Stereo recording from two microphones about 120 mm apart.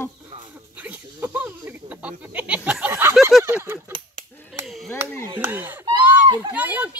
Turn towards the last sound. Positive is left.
turn(degrees=-10)  # may be behind; listen again after turning